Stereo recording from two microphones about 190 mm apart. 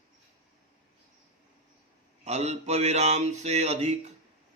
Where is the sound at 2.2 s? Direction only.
35° right (ahead or behind).